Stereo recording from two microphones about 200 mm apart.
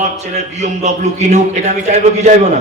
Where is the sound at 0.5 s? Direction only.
35° right (ahead or behind).